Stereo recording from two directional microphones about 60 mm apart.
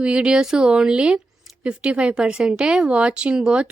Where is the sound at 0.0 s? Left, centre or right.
Centre.